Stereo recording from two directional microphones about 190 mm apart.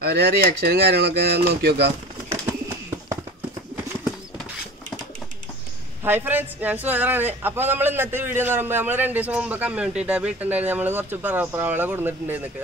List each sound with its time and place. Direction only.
0.0 s speech: 55° right (ahead or behind)
6.0 s speech: 10° right (ahead or behind)